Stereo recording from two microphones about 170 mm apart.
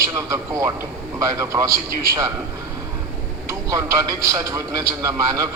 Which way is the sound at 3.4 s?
20° right (ahead or behind).